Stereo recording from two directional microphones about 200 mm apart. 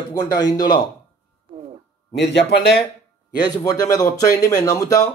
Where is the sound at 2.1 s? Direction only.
55° left (ahead or behind).